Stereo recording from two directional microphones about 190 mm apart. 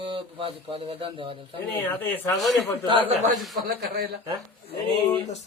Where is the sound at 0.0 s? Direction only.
30° right (ahead or behind).